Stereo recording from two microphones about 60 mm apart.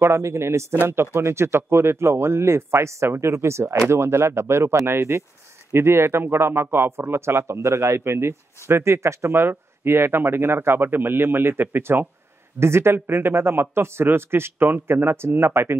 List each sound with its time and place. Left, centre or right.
0.0 s a man's voice: right
12.5 s a man's voice: right